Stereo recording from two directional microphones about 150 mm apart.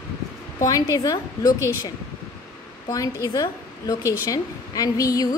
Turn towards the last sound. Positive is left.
turn(degrees=25)  # may be behind; listen again after turning